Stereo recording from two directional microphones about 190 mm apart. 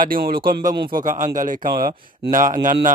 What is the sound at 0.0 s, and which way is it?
A man's voice, 50° right (ahead or behind).